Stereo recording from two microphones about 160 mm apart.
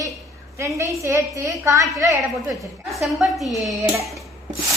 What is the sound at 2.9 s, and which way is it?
Speech, centre (ahead or behind).